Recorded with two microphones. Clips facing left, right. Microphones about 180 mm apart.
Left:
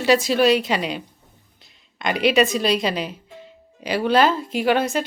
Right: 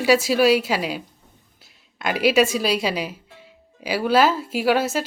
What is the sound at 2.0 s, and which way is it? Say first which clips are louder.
A woman's voice: even; 5° right (ahead or behind).